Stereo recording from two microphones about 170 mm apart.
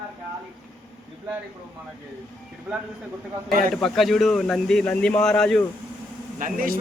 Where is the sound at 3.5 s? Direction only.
55° right (ahead or behind).